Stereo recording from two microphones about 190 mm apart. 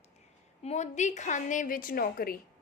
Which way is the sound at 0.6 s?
35° left (ahead or behind).